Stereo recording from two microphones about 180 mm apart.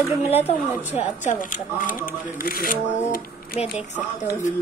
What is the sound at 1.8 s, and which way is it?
Speech, 50° left (ahead or behind).